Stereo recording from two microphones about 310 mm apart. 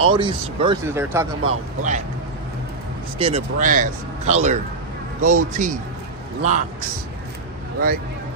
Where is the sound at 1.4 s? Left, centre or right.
Right.